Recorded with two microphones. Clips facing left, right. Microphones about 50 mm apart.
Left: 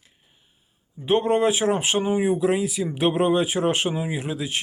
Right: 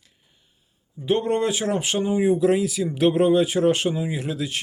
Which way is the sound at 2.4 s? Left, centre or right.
Centre.